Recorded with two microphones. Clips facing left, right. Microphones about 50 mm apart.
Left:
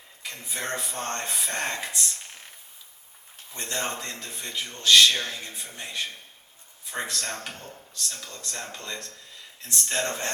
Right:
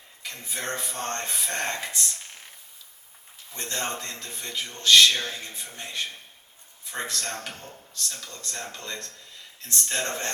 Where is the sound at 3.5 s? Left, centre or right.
Centre.